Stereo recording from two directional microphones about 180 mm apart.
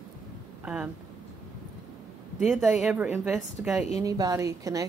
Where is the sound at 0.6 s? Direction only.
5° right (ahead or behind).